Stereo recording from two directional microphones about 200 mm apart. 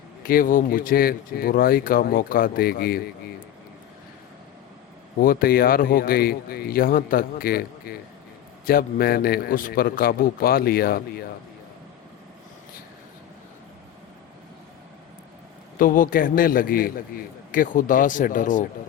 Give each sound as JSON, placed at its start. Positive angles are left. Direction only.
{"t": 0.2, "sound": "a man's voice", "side_deg": 45}
{"t": 5.2, "sound": "a man's voice", "side_deg": 45}
{"t": 15.8, "sound": "a man's voice", "side_deg": 45}